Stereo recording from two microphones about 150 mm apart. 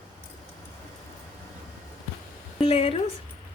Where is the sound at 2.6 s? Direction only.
45° left (ahead or behind).